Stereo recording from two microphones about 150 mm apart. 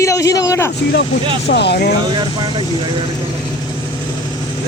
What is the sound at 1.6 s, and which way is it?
Speech, 90° left.